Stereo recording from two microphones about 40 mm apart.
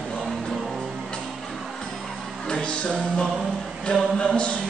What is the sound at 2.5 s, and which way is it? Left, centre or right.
Music, left.